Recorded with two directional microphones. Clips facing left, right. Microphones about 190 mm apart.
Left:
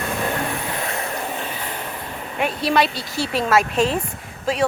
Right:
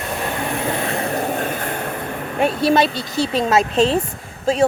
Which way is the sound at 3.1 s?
20° right (ahead or behind).